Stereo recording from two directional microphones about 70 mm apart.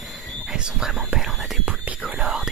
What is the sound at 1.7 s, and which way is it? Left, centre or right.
Whispering, centre.